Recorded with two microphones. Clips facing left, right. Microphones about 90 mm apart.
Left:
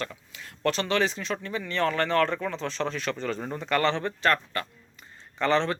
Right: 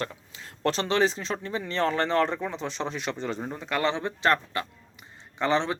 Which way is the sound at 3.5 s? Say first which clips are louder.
Left 3 dB; 5° right (ahead or behind).